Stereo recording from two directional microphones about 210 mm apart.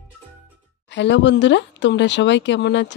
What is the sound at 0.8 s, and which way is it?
Speech, 55° left (ahead or behind).